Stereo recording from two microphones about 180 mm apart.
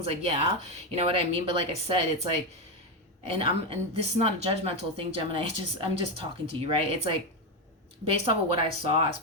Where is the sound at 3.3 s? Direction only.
30° right (ahead or behind).